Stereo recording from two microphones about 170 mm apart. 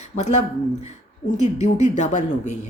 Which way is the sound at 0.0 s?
45° left (ahead or behind).